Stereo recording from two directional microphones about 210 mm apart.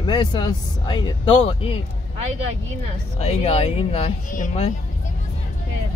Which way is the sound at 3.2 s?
30° left (ahead or behind).